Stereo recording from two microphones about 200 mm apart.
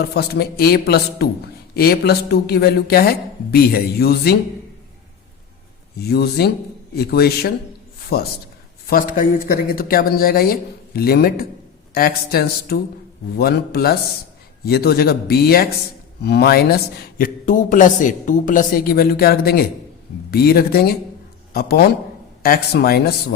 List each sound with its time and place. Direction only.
0.0 s a man's voice: 55° left (ahead or behind)
6.0 s a man's voice: 50° left (ahead or behind)